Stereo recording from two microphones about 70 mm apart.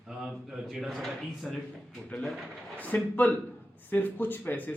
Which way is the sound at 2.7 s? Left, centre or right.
Left.